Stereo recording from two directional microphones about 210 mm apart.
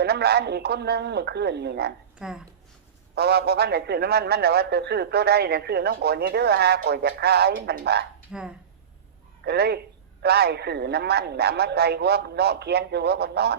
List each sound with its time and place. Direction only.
0.0 s a man's voice: 50° right (ahead or behind)
2.1 s a woman's voice: 5° right (ahead or behind)
3.2 s a man's voice: 50° right (ahead or behind)
8.3 s speech: 5° right (ahead or behind)
9.4 s a man's voice: 50° right (ahead or behind)